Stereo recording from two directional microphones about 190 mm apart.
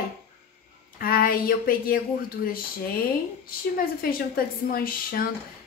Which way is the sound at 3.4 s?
50° left (ahead or behind).